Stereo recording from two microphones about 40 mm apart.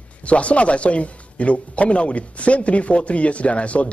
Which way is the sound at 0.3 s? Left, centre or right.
Left.